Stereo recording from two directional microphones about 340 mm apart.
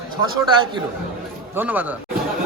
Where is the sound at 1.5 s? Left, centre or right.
Centre.